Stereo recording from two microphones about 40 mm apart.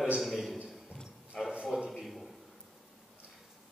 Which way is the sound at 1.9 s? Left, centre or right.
Centre.